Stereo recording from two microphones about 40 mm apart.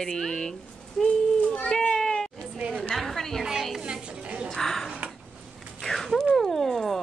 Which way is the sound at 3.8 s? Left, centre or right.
Right.